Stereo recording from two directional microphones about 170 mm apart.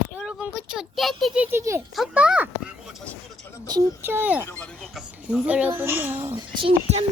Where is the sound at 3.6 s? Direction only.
20° right (ahead or behind).